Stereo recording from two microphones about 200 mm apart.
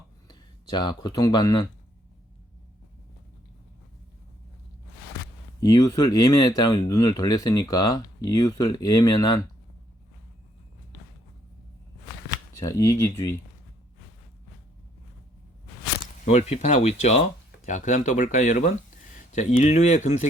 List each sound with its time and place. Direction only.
0.3 s speech: 20° left (ahead or behind)
5.5 s speech: 20° left (ahead or behind)
12.5 s speech: 15° left (ahead or behind)
16.2 s speech: 35° left (ahead or behind)